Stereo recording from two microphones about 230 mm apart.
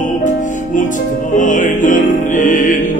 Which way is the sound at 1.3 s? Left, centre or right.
Left.